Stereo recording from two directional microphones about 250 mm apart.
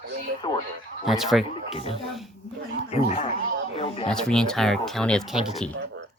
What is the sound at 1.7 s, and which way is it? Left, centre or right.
Speech, left.